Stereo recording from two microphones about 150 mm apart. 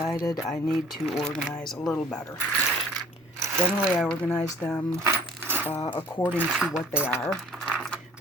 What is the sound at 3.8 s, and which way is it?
Speech, 5° left (ahead or behind).